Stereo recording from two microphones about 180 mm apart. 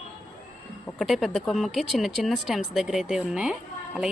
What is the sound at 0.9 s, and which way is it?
Speech, centre (ahead or behind).